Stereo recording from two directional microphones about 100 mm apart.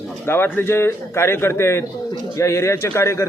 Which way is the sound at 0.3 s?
20° left (ahead or behind).